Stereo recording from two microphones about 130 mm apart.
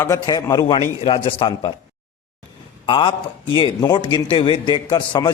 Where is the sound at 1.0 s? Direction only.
45° left (ahead or behind).